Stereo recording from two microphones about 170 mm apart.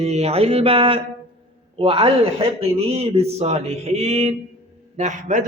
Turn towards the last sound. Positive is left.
turn(degrees=-45)  # may be behind; listen again after turning